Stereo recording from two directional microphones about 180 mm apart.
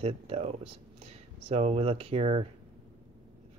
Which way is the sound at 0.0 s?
35° right (ahead or behind).